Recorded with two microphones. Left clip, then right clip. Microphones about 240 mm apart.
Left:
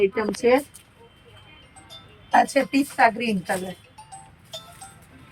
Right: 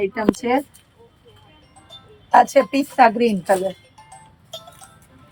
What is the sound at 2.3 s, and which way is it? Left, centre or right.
Speech, centre.